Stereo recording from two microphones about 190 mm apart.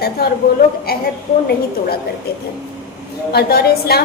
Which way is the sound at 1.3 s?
45° left (ahead or behind).